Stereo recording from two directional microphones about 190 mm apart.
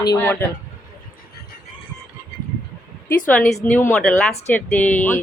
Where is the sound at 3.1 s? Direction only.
10° left (ahead or behind).